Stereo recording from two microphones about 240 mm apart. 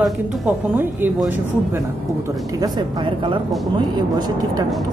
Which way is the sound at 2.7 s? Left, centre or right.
Centre.